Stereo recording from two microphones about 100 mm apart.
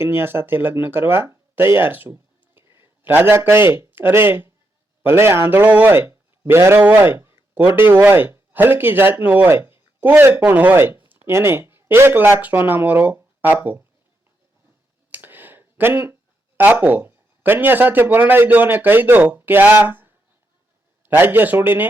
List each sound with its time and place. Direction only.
0.0 s speech: 25° right (ahead or behind)
15.1 s a sound: 20° right (ahead or behind)
16.6 s speech: 15° right (ahead or behind)